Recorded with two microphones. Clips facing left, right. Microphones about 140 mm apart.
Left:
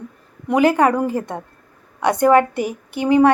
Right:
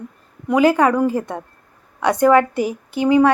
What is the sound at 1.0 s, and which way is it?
A woman's voice, 20° left (ahead or behind).